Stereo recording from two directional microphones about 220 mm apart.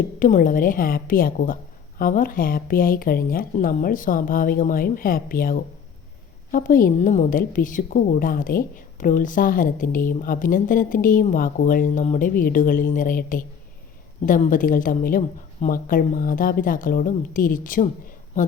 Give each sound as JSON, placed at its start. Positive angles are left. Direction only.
{"t": 0.2, "sound": "a woman's voice", "side_deg": 35}